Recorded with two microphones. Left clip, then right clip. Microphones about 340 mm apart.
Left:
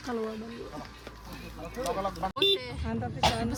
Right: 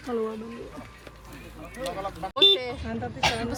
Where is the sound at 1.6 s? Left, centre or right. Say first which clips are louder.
Left 1 dB; left.